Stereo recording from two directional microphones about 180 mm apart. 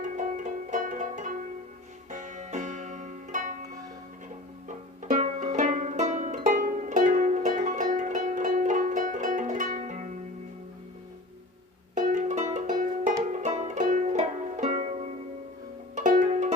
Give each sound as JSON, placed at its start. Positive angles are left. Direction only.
{"t": 0.0, "sound": "music", "side_deg": -45}
{"t": 5.0, "sound": "music", "side_deg": -40}
{"t": 11.9, "sound": "music", "side_deg": -45}